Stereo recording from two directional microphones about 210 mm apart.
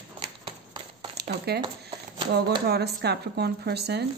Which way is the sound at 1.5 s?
50° right (ahead or behind).